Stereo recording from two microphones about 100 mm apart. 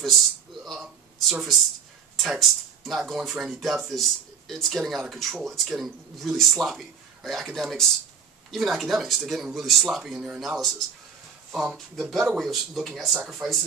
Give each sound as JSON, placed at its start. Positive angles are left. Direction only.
{"t": 0.7, "sound": "speech", "side_deg": 0}
{"t": 11.5, "sound": "speech", "side_deg": 0}